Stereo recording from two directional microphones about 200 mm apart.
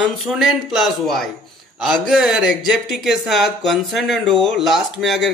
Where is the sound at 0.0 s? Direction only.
Centre (ahead or behind).